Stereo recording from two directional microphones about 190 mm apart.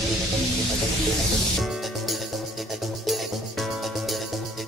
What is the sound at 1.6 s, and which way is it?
Music, centre (ahead or behind).